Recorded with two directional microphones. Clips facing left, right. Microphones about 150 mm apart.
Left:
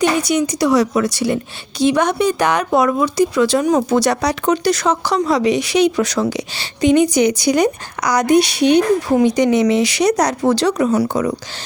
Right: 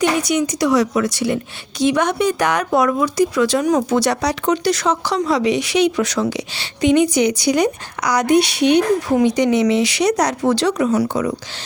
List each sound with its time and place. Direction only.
0.0 s speech: 35° left (ahead or behind)
3.9 s speech: 45° left (ahead or behind)